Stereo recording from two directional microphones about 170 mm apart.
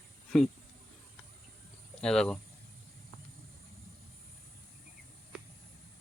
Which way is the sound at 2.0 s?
5° left (ahead or behind).